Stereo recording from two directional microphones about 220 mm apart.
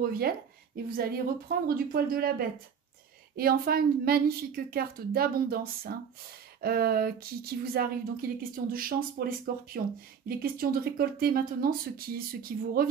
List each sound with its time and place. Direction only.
0.0 s speech: 45° right (ahead or behind)